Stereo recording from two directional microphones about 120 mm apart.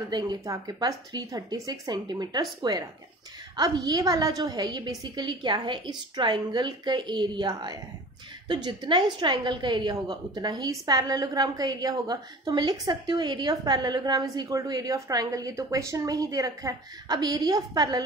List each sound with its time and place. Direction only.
0.1 s a woman's voice: 35° right (ahead or behind)